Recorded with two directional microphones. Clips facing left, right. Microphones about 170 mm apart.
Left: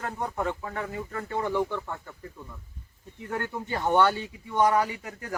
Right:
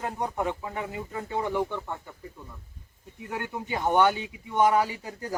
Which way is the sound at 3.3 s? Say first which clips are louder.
Left 1 dB; 15° right (ahead or behind).